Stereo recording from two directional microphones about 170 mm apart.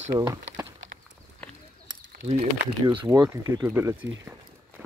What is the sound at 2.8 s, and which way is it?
Speech, 20° right (ahead or behind).